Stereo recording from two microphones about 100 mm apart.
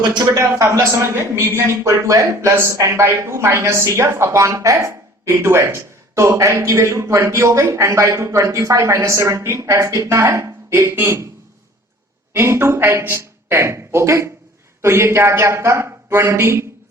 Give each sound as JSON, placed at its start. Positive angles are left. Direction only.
{"t": 0.7, "sound": "a man's voice", "side_deg": -30}
{"t": 12.3, "sound": "a man's voice", "side_deg": -25}